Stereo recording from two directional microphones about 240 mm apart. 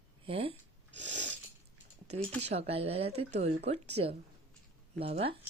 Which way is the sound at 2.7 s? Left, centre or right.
Right.